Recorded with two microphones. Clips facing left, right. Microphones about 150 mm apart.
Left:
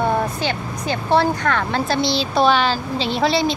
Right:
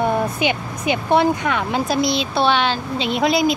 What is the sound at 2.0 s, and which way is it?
A woman's voice, 35° left (ahead or behind).